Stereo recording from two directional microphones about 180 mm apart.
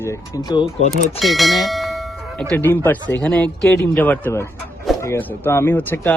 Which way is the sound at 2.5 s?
10° left (ahead or behind).